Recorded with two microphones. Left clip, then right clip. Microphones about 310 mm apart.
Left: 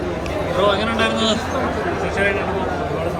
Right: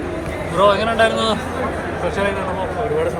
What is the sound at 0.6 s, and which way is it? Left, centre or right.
Speech, centre.